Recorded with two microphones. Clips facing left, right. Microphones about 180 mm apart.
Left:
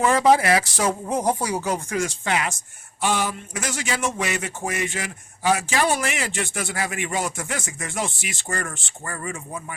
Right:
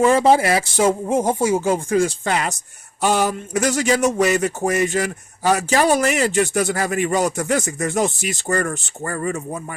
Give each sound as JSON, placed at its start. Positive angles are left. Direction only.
{"t": 0.0, "sound": "speech", "side_deg": -30}